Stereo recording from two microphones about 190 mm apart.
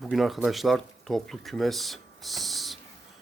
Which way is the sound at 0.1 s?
Centre (ahead or behind).